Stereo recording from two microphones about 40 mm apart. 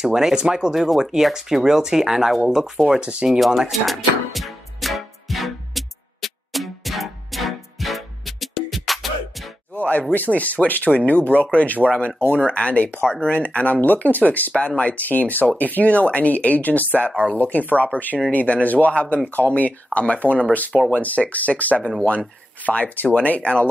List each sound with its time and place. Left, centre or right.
0.0 s speech: centre
0.7 s speech: centre
3.0 s speech: right
3.3 s speech: centre
3.7 s music: centre
9.8 s a sound: left
10.1 s speech: left